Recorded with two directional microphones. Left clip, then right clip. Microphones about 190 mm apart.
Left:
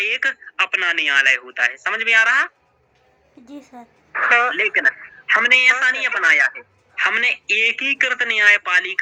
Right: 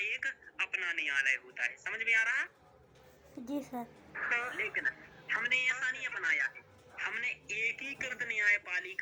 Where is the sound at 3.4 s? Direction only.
Centre (ahead or behind).